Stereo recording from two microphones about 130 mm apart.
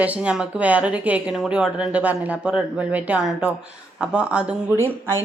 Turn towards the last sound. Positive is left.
turn(degrees=-20)  # may be behind; listen again after turning